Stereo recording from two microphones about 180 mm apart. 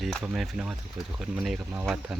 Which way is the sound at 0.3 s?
5° right (ahead or behind).